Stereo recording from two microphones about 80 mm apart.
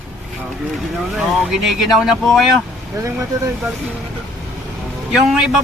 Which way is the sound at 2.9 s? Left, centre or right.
Right.